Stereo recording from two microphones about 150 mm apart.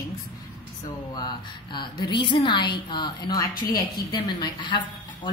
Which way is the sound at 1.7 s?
30° left (ahead or behind).